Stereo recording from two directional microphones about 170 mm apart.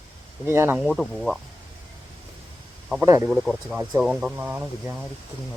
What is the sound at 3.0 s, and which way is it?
Speech, 15° right (ahead or behind).